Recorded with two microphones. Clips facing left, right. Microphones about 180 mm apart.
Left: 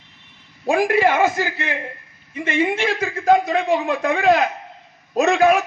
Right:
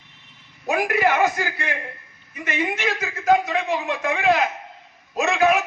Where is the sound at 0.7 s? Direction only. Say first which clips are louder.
Left 4 dB; 30° left (ahead or behind).